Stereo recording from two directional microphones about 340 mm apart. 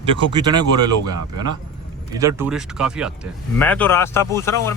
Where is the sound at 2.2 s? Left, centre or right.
Centre.